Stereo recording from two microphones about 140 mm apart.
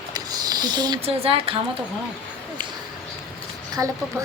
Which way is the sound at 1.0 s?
45° right (ahead or behind).